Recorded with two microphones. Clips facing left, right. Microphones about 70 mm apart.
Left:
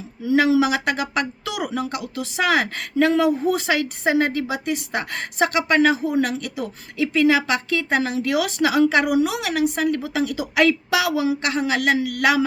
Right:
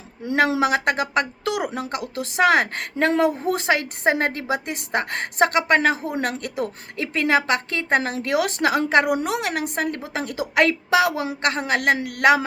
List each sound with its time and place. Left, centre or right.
0.3 s a woman's voice: right
1.7 s a woman's voice: right